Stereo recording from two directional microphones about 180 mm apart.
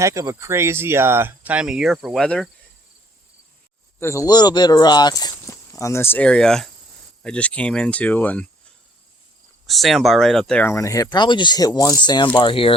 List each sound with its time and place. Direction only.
0.0 s speech: 15° right (ahead or behind); by 2.5 s 5° left (ahead or behind)
4.0 s speech: 15° left (ahead or behind)
9.6 s speech: centre (ahead or behind); by 12.7 s 30° left (ahead or behind)